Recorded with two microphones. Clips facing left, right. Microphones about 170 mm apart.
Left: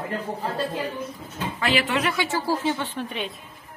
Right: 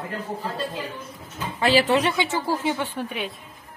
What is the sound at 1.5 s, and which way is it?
Speech, 35° right (ahead or behind).